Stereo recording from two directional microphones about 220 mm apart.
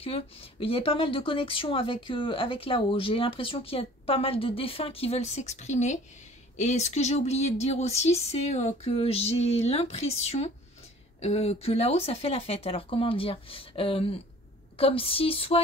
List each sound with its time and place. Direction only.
0.0 s speech: 25° left (ahead or behind)